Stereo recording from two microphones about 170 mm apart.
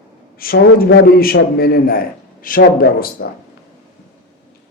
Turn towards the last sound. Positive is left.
turn(degrees=60)  # may be behind; listen again after turning